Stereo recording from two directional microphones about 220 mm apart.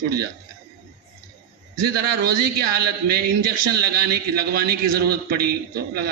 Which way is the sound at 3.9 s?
45° right (ahead or behind).